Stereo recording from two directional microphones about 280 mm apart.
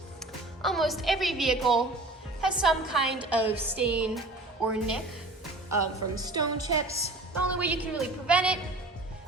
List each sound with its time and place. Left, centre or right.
0.6 s a woman's voice: centre
5.7 s a woman's voice: centre
6.4 s a woman's voice: right
7.5 s a woman's voice: centre